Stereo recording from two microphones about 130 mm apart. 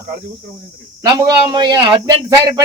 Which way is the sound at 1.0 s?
35° right (ahead or behind).